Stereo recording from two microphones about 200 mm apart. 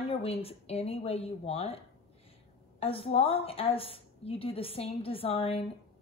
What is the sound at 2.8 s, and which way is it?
A woman's voice, 30° left (ahead or behind).